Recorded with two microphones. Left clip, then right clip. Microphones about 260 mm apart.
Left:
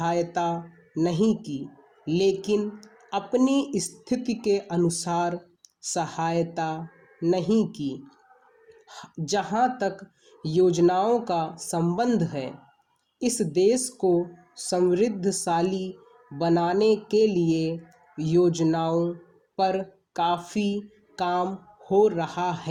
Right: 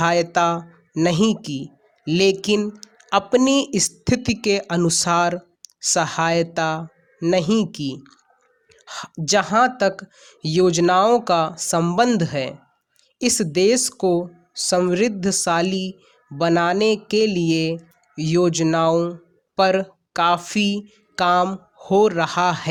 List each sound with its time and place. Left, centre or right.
0.0 s speech: right